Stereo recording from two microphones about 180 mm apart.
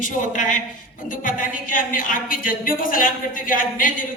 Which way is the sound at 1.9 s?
50° left (ahead or behind).